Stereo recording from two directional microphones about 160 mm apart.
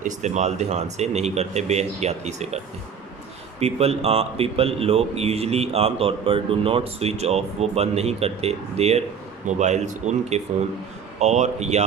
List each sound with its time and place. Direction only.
0.0 s speech: 50° right (ahead or behind)
3.6 s a man's voice: 40° right (ahead or behind)